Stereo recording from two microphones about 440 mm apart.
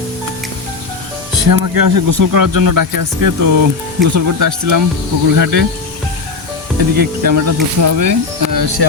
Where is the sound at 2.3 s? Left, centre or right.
Right.